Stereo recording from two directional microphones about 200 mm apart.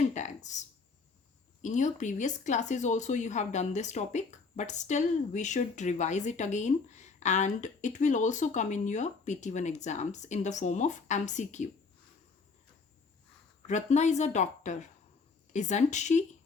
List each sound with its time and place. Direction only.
0.1 s speech: 35° left (ahead or behind)
1.6 s speech: 40° left (ahead or behind)
13.7 s speech: 35° left (ahead or behind)